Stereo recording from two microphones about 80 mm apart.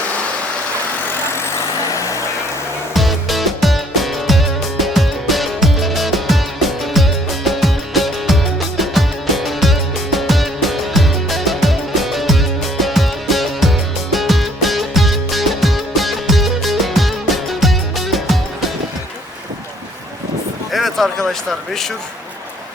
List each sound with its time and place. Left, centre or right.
1.5 s vehicle: left
2.9 s music: centre
20.7 s a sound: centre